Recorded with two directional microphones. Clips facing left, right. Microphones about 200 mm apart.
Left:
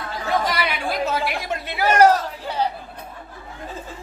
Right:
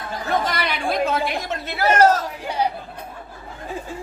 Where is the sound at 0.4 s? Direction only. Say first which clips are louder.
Even; 10° left (ahead or behind).